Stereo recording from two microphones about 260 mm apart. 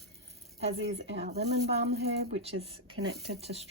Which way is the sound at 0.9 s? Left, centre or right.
Right.